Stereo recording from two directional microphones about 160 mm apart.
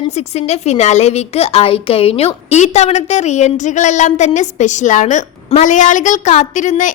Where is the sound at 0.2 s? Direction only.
45° left (ahead or behind).